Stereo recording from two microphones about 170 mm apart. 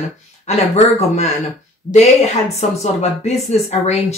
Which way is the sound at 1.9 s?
35° left (ahead or behind).